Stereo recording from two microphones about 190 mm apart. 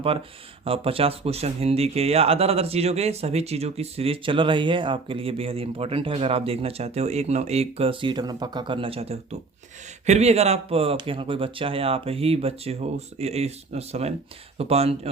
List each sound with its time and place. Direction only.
0.6 s speech: 30° right (ahead or behind)